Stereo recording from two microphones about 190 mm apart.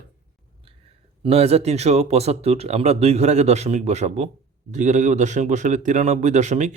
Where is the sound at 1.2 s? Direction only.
30° right (ahead or behind).